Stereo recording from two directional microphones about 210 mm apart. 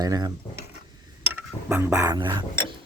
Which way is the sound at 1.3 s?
10° right (ahead or behind).